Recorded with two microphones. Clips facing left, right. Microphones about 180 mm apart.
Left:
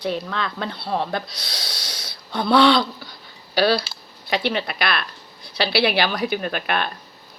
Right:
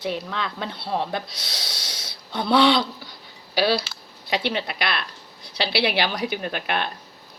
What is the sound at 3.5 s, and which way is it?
A woman's voice, 10° right (ahead or behind).